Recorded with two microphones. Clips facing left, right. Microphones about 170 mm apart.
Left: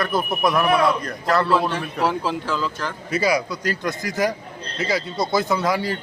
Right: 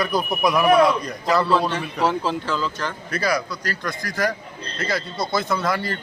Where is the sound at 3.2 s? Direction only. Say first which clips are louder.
Left 2 dB; 15° left (ahead or behind).